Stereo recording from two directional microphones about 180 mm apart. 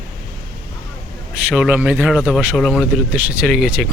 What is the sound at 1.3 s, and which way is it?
Speech, 5° right (ahead or behind).